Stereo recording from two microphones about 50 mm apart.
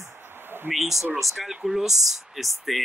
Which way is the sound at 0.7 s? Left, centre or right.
Centre.